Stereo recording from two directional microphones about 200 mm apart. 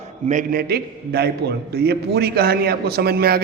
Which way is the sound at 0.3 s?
45° right (ahead or behind).